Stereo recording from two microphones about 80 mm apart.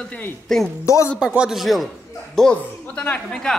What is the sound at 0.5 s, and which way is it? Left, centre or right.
Speech, centre.